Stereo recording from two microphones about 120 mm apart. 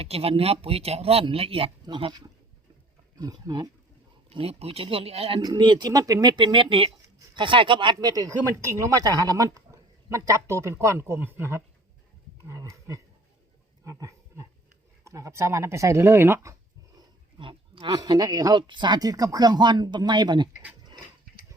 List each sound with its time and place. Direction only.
0.0 s a woman's voice: 55° right (ahead or behind); by 3.7 s 35° right (ahead or behind)
4.3 s speech: 55° right (ahead or behind)
5.4 s a woman's voice: 35° right (ahead or behind); by 11.6 s 20° right (ahead or behind)
12.5 s a sound: 25° right (ahead or behind)
15.0 s speech: 25° right (ahead or behind)
17.3 s a woman's voice: 45° right (ahead or behind)